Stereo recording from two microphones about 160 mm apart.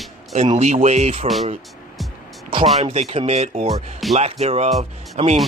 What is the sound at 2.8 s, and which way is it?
Speech, 40° right (ahead or behind).